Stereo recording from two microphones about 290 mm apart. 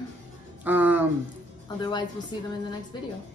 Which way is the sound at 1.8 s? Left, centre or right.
Centre.